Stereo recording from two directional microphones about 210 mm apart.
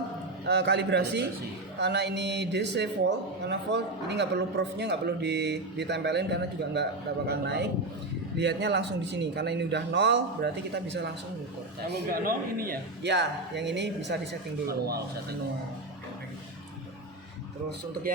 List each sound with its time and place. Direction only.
0.4 s a man's voice: 55° right (ahead or behind)
12.2 s a man's voice: 45° right (ahead or behind)